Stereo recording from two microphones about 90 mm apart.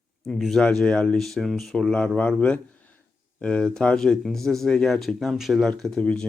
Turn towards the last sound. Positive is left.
turn(degrees=10)  # may be behind; listen again after turning